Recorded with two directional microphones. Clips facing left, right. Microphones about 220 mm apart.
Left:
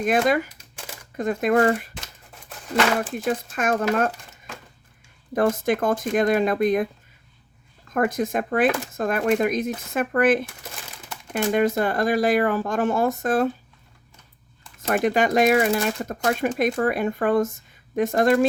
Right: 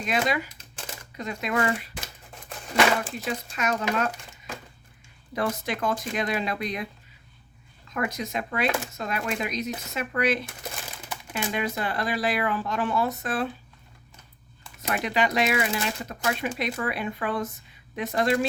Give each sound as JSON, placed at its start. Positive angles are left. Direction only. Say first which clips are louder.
{"t": 0.0, "sound": "speech", "louder": "left 6 dB", "side_deg": 50}
{"t": 3.5, "sound": "speech", "louder": "left 4 dB", "side_deg": 50}
{"t": 5.3, "sound": "speech", "louder": "left 8 dB", "side_deg": 50}
{"t": 7.9, "sound": "speech", "louder": "left 8 dB", "side_deg": 50}
{"t": 14.8, "sound": "speech", "louder": "left 6 dB", "side_deg": 50}